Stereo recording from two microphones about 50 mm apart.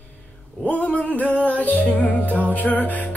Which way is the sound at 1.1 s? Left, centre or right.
Left.